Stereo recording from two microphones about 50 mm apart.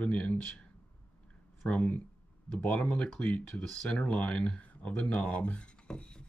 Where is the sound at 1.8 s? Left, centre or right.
Left.